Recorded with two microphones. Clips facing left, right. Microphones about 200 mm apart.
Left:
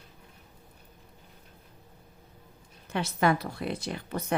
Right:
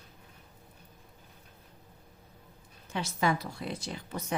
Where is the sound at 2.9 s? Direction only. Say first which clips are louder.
Left 4 dB; 60° left (ahead or behind).